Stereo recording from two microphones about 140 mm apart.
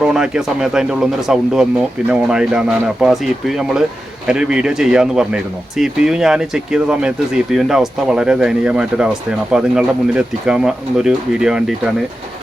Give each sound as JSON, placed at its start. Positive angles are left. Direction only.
{"t": 0.0, "sound": "speech", "side_deg": -5}